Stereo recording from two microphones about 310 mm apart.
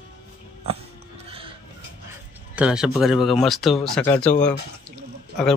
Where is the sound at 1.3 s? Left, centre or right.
Centre.